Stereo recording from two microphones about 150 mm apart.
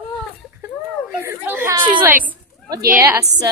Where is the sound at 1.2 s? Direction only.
15° right (ahead or behind).